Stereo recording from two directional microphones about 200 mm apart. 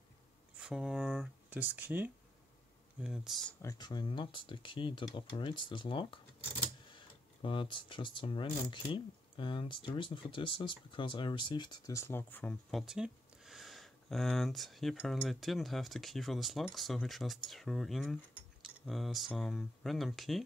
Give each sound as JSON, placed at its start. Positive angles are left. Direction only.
{"t": 0.6, "sound": "speech", "side_deg": -5}
{"t": 3.6, "sound": "speech", "side_deg": 20}